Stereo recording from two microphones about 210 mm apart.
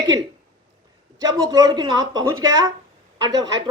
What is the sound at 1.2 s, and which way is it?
A man's voice, 20° right (ahead or behind).